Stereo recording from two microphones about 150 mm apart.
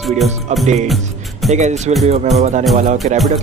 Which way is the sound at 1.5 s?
50° right (ahead or behind).